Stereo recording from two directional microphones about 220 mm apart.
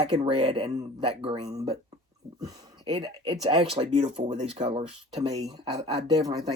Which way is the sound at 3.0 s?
20° right (ahead or behind).